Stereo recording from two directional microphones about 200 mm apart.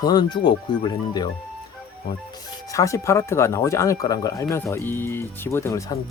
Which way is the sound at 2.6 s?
15° left (ahead or behind).